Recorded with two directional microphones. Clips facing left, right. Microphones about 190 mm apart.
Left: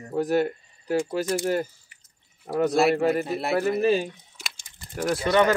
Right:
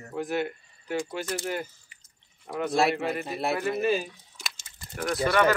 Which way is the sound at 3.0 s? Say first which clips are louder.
Left 7 dB; 40° left (ahead or behind).